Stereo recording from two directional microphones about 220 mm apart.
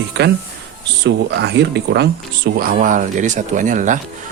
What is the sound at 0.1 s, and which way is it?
Speech, 50° right (ahead or behind).